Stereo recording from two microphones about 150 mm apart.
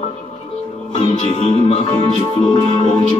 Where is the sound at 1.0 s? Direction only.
35° left (ahead or behind).